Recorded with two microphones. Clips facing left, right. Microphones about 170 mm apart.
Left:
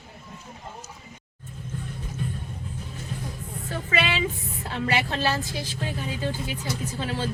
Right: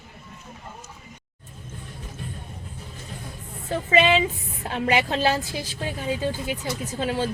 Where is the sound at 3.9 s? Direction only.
25° right (ahead or behind).